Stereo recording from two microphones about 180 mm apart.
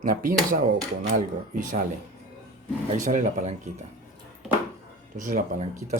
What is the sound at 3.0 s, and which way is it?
Speech, 45° right (ahead or behind).